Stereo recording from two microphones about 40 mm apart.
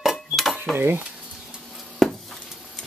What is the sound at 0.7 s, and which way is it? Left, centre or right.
Speech, right.